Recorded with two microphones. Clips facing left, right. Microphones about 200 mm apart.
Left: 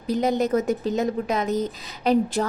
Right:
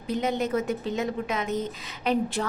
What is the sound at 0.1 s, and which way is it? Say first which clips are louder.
A woman's voice: left 5 dB; 40° left (ahead or behind).